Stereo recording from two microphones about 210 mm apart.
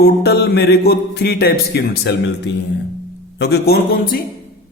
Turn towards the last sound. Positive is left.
turn(degrees=50)  # may be behind; listen again after turning